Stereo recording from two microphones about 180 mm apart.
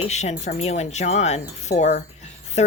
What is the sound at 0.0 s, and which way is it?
Speech, 40° left (ahead or behind).